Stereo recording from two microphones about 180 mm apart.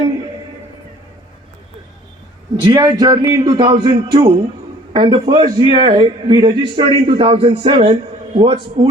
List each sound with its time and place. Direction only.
2.6 s a man's voice: 25° right (ahead or behind)